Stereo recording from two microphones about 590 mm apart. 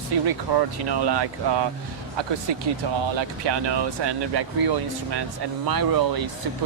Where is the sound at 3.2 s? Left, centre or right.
Right.